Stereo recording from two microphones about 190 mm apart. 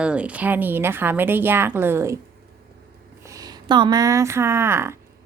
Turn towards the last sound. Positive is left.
turn(degrees=-15)  # may be behind; listen again after turning